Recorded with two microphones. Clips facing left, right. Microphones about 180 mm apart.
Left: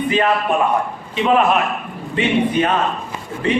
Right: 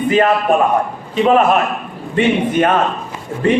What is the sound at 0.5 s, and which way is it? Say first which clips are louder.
A man's voice: right 4 dB; 45° right (ahead or behind).